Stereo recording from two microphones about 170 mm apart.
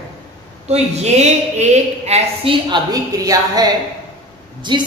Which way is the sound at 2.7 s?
20° right (ahead or behind).